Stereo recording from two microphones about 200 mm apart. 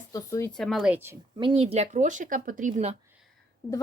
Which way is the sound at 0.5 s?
Centre (ahead or behind).